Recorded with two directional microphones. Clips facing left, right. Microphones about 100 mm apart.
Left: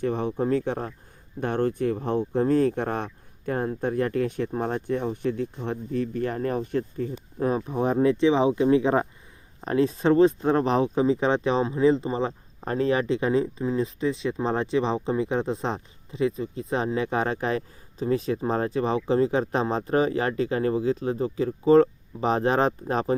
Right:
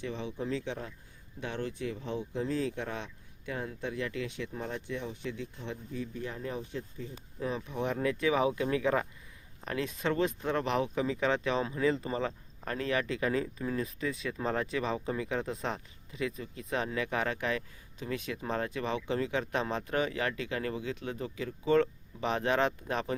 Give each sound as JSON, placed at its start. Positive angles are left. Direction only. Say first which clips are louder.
{"t": 0.0, "sound": "speech", "louder": "left 11 dB", "side_deg": 50}